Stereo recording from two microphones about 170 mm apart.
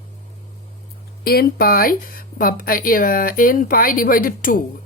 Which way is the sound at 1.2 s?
65° left (ahead or behind).